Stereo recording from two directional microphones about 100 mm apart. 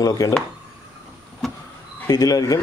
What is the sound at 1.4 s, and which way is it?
Vehicle, centre (ahead or behind).